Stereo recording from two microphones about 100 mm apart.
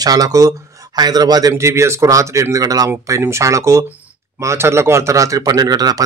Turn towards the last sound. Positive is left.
turn(degrees=-40)  # may be behind; listen again after turning